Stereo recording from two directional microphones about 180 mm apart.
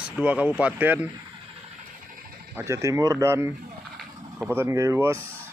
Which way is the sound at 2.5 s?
15° right (ahead or behind).